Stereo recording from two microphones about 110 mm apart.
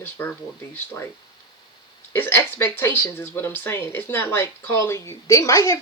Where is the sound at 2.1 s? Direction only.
20° left (ahead or behind).